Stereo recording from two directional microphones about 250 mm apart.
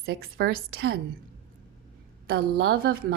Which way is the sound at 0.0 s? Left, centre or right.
Right.